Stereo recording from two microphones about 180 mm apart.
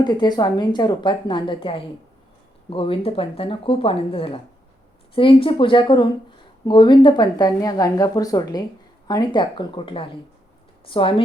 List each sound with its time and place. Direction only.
0.0 s speech: 25° left (ahead or behind)